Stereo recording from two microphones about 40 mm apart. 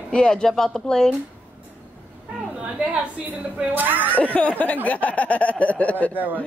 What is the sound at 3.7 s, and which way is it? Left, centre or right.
Speech, right.